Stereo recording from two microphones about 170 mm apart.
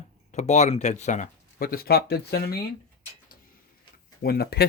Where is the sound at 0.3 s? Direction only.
45° left (ahead or behind); by 2.6 s 65° left (ahead or behind).